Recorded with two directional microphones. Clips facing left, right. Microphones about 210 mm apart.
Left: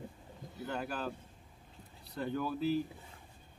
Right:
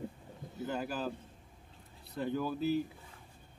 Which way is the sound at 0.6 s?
5° right (ahead or behind).